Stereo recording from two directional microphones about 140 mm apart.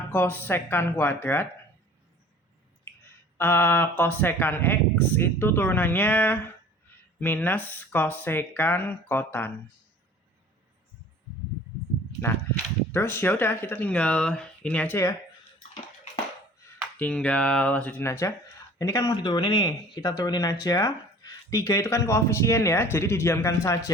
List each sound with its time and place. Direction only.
0.1 s speech: 15° left (ahead or behind)
3.3 s speech: 15° left (ahead or behind)
12.9 s speech: 15° left (ahead or behind)
17.0 s speech: 10° left (ahead or behind)